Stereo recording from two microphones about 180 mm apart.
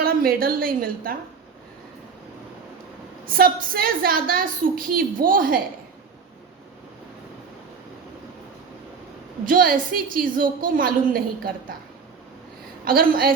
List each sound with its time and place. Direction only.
0.0 s a woman's voice: 55° right (ahead or behind)
3.2 s a woman's voice: 55° right (ahead or behind)
9.5 s a woman's voice: 50° right (ahead or behind)
12.8 s a woman's voice: 55° right (ahead or behind)